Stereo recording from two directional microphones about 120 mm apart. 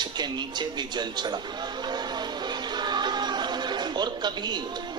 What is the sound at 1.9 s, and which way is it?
Music, 35° right (ahead or behind).